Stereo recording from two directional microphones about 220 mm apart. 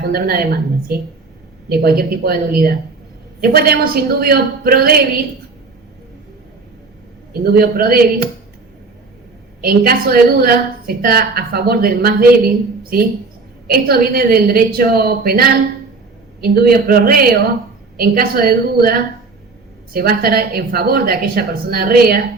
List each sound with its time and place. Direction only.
0.0 s a woman's voice: 45° right (ahead or behind)
7.4 s a woman's voice: 40° right (ahead or behind)
9.6 s a woman's voice: 45° right (ahead or behind)